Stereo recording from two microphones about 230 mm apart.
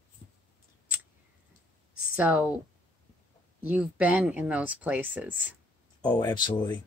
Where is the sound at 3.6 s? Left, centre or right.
Centre.